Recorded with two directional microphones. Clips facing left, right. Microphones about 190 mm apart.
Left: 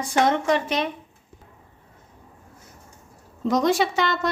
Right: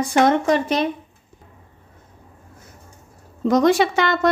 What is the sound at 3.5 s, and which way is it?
Speech, 60° right (ahead or behind).